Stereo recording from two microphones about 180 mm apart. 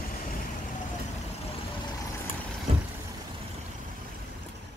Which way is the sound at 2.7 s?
30° right (ahead or behind).